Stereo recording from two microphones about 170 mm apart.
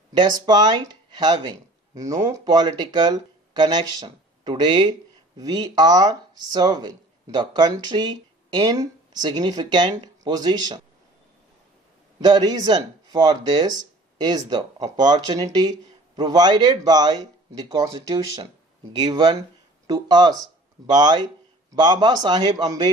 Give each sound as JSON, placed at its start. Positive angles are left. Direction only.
{"t": 0.1, "sound": "speech", "side_deg": -25}
{"t": 12.2, "sound": "speech", "side_deg": -25}